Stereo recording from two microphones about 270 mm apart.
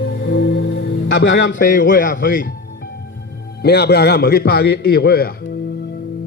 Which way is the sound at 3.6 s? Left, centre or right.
Left.